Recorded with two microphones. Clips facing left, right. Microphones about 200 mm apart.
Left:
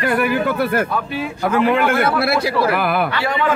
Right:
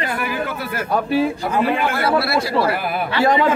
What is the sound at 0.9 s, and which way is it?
Speech, 40° right (ahead or behind).